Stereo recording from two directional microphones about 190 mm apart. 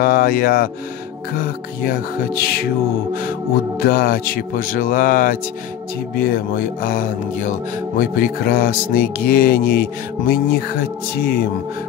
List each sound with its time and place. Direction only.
0.0 s speech: 50° left (ahead or behind)
3.8 s speech: 50° left (ahead or behind)